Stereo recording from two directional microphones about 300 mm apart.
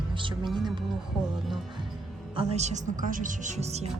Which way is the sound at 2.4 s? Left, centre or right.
Right.